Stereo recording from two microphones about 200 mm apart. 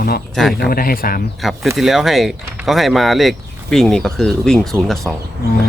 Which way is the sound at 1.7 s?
Centre (ahead or behind).